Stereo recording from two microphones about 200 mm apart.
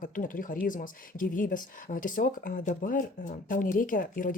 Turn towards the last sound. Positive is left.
turn(degrees=45)  # may be behind; listen again after turning